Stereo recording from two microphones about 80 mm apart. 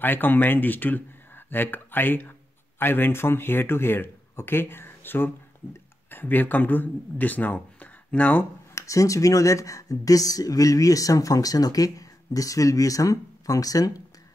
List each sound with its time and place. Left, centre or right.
0.0 s speech: left
8.7 s speech: left